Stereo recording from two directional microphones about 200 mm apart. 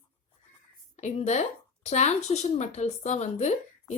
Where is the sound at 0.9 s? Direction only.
35° left (ahead or behind).